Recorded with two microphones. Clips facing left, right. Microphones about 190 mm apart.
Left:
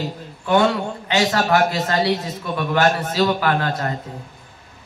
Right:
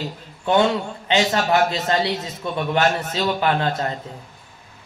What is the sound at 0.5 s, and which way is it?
Speech, 25° right (ahead or behind).